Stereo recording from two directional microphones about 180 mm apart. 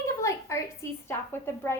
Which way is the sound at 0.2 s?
15° left (ahead or behind).